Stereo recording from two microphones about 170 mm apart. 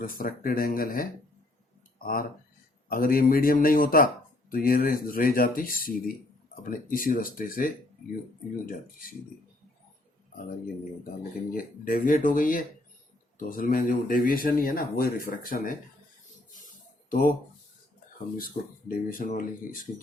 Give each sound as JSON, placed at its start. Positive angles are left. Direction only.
{"t": 0.0, "sound": "speech", "side_deg": 55}
{"t": 11.5, "sound": "speech", "side_deg": 55}
{"t": 16.6, "sound": "a sound", "side_deg": 50}
{"t": 18.3, "sound": "speech", "side_deg": 55}